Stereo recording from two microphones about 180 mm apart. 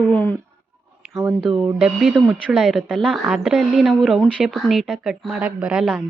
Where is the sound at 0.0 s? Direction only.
10° left (ahead or behind).